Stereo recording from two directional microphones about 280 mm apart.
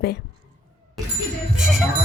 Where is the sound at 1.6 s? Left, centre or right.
Centre.